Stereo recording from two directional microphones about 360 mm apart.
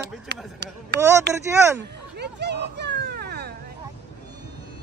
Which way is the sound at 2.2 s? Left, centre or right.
Right.